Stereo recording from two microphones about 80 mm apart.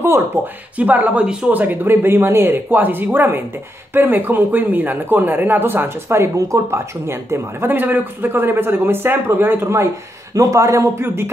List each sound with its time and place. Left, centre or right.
0.7 s speech: right
10.3 s speech: right